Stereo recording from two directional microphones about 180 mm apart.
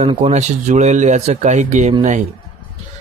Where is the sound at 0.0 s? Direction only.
30° right (ahead or behind).